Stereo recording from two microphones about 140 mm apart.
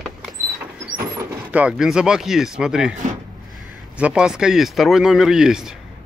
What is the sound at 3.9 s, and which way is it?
Speech, 5° right (ahead or behind).